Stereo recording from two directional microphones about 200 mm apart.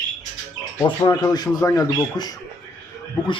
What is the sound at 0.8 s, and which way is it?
Speech, 20° left (ahead or behind).